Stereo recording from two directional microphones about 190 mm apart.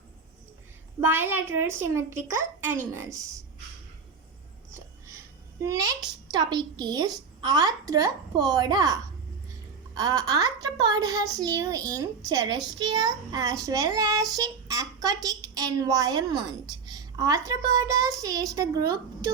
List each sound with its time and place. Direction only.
1.0 s a child's voice: 10° right (ahead or behind)
6.3 s speech: 20° right (ahead or behind)